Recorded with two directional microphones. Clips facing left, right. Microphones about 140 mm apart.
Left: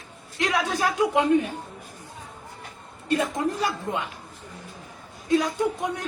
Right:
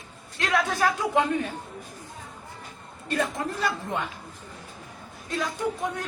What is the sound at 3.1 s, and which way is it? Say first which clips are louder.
Speech: left 3 dB; 15° left (ahead or behind).